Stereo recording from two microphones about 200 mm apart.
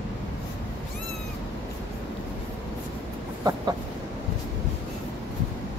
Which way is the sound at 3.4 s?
20° right (ahead or behind).